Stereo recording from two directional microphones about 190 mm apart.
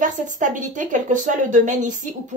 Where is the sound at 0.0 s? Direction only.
40° right (ahead or behind).